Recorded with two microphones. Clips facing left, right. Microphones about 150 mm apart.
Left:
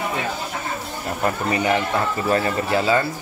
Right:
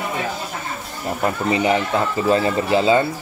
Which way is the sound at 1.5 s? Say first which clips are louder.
Right 3 dB; 20° right (ahead or behind).